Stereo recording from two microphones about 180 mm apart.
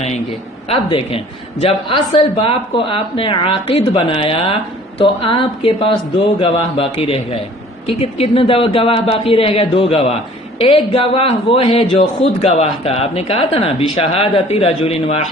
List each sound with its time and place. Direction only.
0.7 s a man's voice: 30° left (ahead or behind)